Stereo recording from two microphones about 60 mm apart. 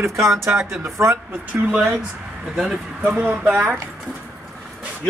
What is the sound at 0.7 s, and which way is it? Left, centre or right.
Speech, right.